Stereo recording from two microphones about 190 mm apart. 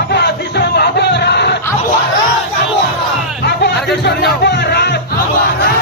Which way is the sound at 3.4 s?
60° left (ahead or behind).